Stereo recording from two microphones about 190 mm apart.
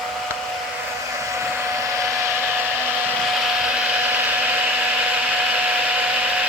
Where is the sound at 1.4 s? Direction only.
15° right (ahead or behind).